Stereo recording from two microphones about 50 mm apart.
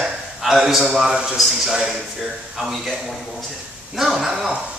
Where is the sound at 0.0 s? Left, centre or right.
Centre.